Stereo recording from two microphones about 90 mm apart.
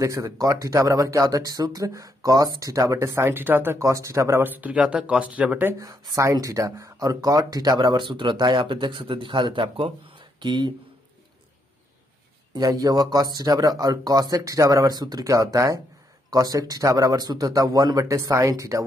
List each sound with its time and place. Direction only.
0.0 s speech: 35° right (ahead or behind)
3.2 s speech: 25° right (ahead or behind)
5.8 s speech: 35° right (ahead or behind); by 10.2 s 80° right
10.4 s speech: 55° right (ahead or behind)
12.5 s a man's voice: 45° right (ahead or behind)